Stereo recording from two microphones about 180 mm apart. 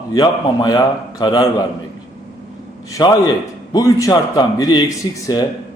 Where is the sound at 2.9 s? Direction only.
20° left (ahead or behind).